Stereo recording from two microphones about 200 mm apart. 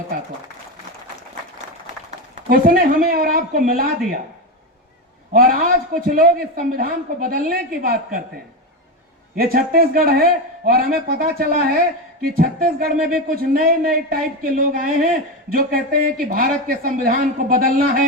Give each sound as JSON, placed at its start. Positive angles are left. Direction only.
{"t": 2.0, "sound": "speech", "side_deg": -45}
{"t": 5.3, "sound": "speech", "side_deg": -45}
{"t": 9.3, "sound": "speech", "side_deg": -45}